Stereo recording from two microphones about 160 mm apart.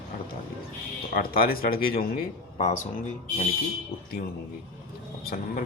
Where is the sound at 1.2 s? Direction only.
70° left (ahead or behind).